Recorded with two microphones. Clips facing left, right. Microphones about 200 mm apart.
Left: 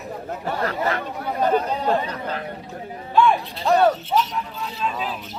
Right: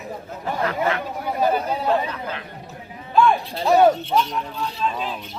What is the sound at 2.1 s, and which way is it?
Speech, 40° left (ahead or behind).